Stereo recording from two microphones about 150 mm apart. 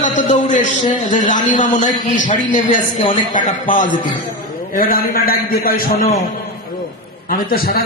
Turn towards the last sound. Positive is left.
turn(degrees=75)  # may be behind; listen again after turning